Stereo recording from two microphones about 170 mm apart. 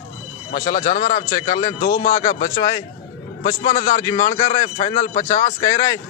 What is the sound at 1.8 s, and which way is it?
Speech, 55° left (ahead or behind).